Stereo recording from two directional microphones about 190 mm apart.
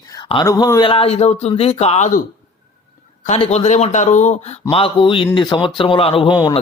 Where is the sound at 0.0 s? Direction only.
20° left (ahead or behind); by 2.2 s 40° left (ahead or behind).